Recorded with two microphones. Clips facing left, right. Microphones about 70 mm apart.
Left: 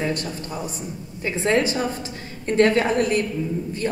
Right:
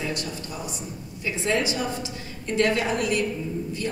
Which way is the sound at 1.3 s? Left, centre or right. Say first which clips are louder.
Left 4 dB; left.